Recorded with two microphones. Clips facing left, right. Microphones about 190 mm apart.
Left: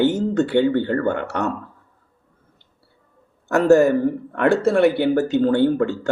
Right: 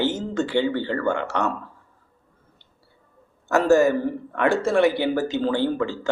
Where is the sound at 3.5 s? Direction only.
60° left (ahead or behind).